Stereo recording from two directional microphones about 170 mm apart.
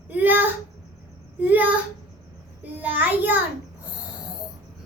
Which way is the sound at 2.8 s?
10° right (ahead or behind).